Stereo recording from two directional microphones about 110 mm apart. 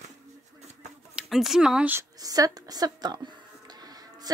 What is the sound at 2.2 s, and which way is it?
A woman's voice, 35° right (ahead or behind).